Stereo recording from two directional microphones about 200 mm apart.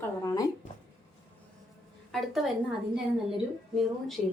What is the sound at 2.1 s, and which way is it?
Speech, centre (ahead or behind).